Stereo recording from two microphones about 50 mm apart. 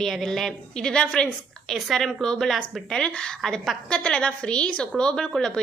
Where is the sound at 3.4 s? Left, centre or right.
Centre.